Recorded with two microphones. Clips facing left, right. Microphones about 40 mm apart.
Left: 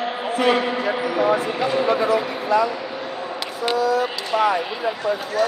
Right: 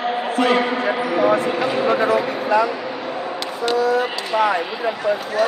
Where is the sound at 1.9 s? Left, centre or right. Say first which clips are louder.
Right 2 dB; right.